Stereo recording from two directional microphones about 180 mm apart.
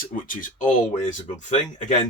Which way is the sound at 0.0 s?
50° left (ahead or behind).